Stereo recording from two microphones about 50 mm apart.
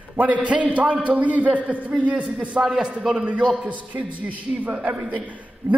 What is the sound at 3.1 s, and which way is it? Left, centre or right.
A man's voice, right.